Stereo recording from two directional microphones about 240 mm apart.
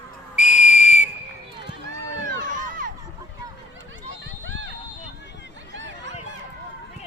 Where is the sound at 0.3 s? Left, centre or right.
Left.